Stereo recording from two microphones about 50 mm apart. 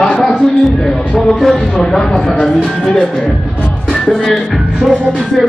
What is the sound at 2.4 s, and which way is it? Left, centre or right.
Speech, centre.